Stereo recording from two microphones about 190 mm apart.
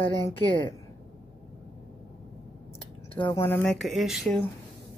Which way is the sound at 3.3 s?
10° left (ahead or behind).